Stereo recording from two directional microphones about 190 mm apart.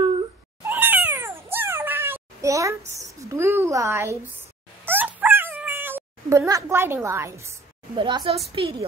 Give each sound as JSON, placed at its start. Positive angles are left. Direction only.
{"t": 0.7, "sound": "cat", "side_deg": -10}
{"t": 4.8, "sound": "dog", "side_deg": -10}
{"t": 7.9, "sound": "speech", "side_deg": -25}